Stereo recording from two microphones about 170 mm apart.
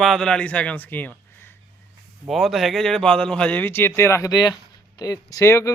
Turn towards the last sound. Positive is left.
turn(degrees=15)  # may be behind; listen again after turning